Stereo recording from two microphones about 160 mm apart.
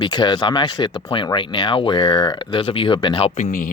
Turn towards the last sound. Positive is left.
turn(degrees=60)  # may be behind; listen again after turning